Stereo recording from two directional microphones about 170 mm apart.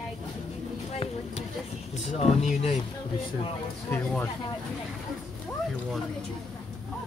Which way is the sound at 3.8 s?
10° left (ahead or behind).